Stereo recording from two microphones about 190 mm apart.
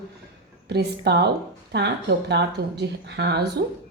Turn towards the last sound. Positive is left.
turn(degrees=-60)  # may be behind; listen again after turning